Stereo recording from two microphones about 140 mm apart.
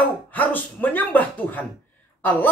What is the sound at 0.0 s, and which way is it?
Speech, 10° left (ahead or behind).